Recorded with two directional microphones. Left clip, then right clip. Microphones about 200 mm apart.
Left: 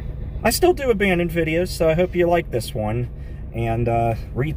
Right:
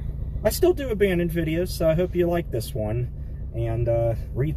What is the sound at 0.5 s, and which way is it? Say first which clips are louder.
Speech: left 4 dB; 5° left (ahead or behind).